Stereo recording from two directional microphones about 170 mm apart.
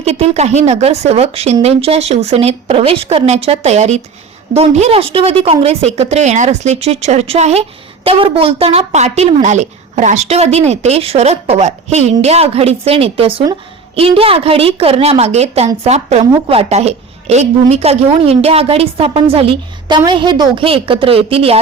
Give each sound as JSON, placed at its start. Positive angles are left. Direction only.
{"t": 0.0, "sound": "a woman's voice", "side_deg": -35}